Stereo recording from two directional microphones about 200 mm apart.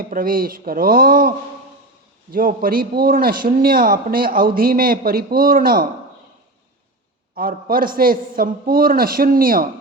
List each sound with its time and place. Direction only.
0.0 s a man's voice: 45° right (ahead or behind)
2.3 s a man's voice: 45° right (ahead or behind)
7.3 s a man's voice: 45° right (ahead or behind)